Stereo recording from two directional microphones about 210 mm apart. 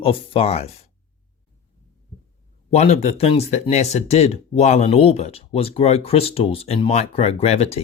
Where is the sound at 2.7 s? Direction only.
30° left (ahead or behind).